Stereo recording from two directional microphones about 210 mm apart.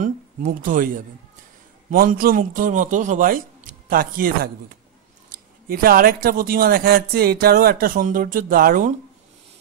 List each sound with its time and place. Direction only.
0.0 s a man's voice: 35° right (ahead or behind)
5.7 s speech: 45° right (ahead or behind)